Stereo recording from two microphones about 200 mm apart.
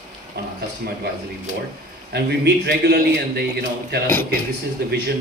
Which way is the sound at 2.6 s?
55° right (ahead or behind).